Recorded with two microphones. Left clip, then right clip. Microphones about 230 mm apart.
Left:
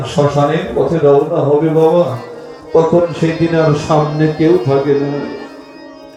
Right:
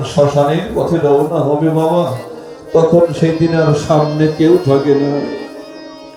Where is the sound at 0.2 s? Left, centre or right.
Right.